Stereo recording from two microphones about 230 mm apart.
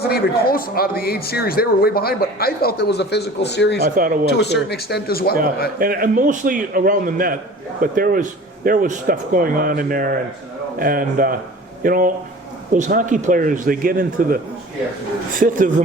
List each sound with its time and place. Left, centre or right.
0.0 s speech: left
4.0 s a man's voice: right
4.4 s speech: left
5.8 s a man's voice: right
15.4 s a man's voice: right